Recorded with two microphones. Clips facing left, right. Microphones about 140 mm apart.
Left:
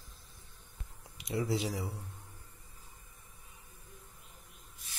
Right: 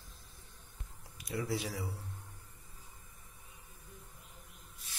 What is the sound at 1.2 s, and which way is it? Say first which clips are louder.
Speech: left 3 dB; 25° left (ahead or behind).